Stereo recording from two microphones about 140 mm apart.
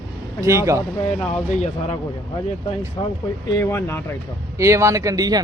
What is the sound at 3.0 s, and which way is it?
Speech, 35° left (ahead or behind).